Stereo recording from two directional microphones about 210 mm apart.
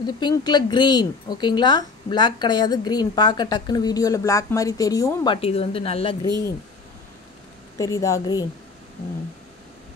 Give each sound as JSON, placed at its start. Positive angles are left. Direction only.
{"t": 0.0, "sound": "a woman's voice", "side_deg": 20}
{"t": 7.7, "sound": "speech", "side_deg": 15}